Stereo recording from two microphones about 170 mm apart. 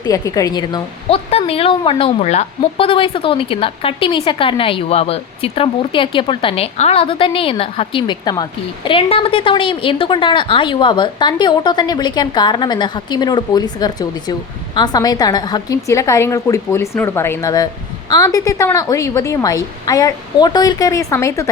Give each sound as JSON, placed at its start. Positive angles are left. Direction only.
{"t": 0.0, "sound": "a woman's voice", "side_deg": 20}
{"t": 1.3, "sound": "a woman's voice", "side_deg": 35}